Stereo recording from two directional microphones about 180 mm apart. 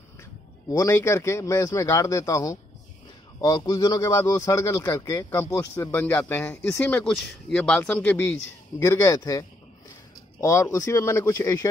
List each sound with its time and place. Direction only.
0.2 s a man's voice: 15° left (ahead or behind)